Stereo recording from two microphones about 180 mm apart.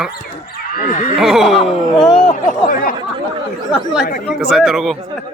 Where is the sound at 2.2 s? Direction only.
50° left (ahead or behind).